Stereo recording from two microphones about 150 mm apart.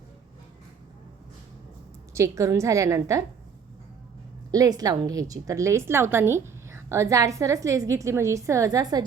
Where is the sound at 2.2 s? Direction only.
20° right (ahead or behind).